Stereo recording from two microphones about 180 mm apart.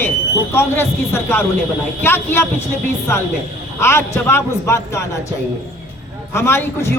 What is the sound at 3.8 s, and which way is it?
A man's voice, 15° left (ahead or behind).